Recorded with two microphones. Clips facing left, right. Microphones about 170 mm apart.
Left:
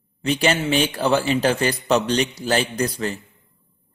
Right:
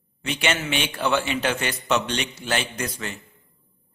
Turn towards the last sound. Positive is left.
turn(degrees=35)  # may be behind; listen again after turning